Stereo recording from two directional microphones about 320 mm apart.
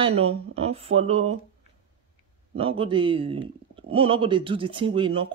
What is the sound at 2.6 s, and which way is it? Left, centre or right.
Speech, centre.